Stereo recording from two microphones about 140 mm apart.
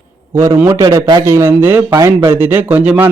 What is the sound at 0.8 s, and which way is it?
A man's voice, 30° right (ahead or behind).